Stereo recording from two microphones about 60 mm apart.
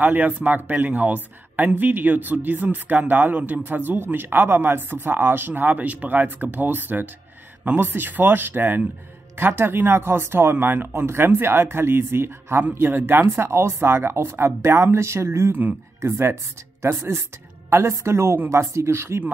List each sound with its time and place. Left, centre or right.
0.0 s speech: right